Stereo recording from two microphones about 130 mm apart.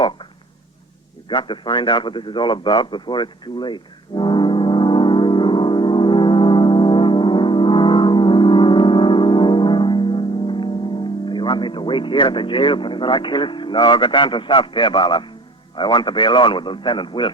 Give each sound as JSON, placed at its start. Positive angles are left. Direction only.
{"t": 1.3, "sound": "radio", "side_deg": 40}
{"t": 15.7, "sound": "speech", "side_deg": 40}